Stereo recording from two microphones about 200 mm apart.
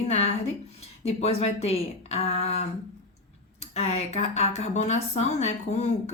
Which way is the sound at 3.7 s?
30° left (ahead or behind).